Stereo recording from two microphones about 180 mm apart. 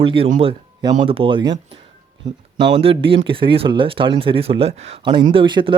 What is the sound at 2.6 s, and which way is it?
Speech, 25° right (ahead or behind).